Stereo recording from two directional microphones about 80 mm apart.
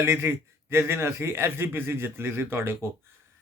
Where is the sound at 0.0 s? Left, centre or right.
Right.